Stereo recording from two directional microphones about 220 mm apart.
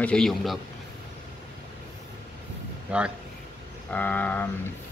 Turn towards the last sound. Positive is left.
turn(degrees=5)  # may be behind; listen again after turning